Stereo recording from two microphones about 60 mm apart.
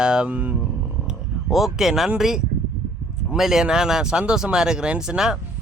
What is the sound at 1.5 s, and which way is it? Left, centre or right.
Speech, centre.